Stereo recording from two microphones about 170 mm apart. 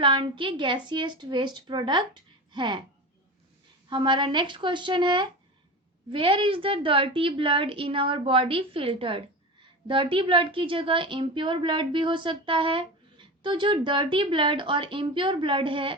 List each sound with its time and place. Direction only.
0.0 s a woman's voice: 30° right (ahead or behind)
3.8 s a woman's voice: 25° right (ahead or behind)